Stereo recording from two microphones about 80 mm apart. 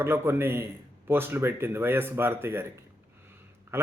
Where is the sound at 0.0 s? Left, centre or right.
Right.